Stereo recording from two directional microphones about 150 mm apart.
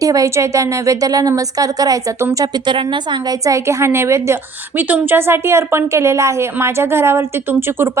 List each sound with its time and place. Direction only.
0.0 s a woman's voice: 25° right (ahead or behind)